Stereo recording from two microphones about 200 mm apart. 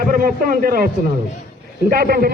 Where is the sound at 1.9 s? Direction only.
50° right (ahead or behind).